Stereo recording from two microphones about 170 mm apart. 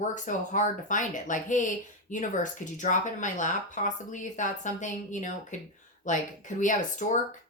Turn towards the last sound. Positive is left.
turn(degrees=45)  # may be behind; listen again after turning